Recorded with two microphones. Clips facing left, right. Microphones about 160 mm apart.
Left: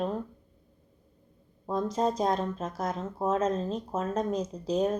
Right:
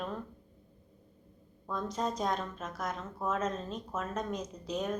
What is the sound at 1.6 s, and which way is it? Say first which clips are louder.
A woman's voice: left 7 dB; 30° left (ahead or behind).